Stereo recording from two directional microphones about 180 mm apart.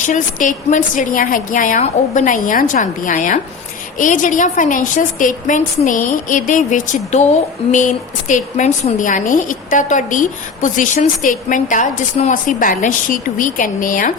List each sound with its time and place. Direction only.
0.1 s a woman's voice: 45° left (ahead or behind)